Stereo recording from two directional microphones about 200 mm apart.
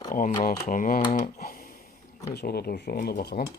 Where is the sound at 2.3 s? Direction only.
50° left (ahead or behind).